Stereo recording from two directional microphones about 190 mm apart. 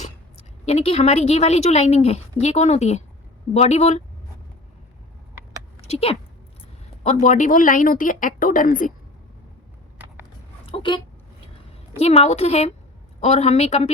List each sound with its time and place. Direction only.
0.6 s a woman's voice: 35° left (ahead or behind)
5.9 s a woman's voice: 30° left (ahead or behind)
10.7 s a woman's voice: 25° left (ahead or behind)